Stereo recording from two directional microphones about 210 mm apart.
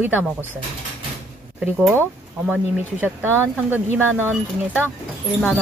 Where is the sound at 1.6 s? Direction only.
10° right (ahead or behind).